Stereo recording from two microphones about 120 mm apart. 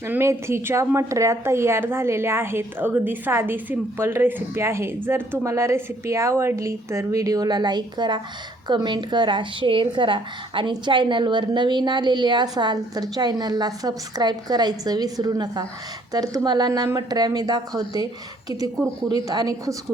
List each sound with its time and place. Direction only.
0.1 s a woman's voice: 20° right (ahead or behind)